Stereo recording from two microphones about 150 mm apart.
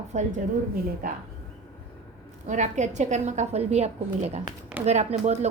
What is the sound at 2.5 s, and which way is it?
A woman's voice, 50° right (ahead or behind).